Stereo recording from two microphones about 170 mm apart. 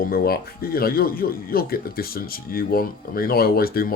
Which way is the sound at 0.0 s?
60° left (ahead or behind).